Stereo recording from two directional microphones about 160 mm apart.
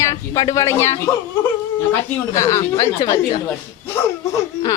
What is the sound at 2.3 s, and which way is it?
Speech, 20° left (ahead or behind).